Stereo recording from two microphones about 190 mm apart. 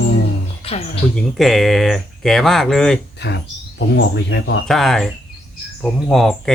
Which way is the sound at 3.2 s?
65° left (ahead or behind).